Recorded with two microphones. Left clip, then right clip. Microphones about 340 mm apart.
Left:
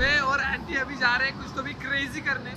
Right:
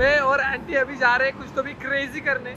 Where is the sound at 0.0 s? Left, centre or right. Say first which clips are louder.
Right 5 dB; centre.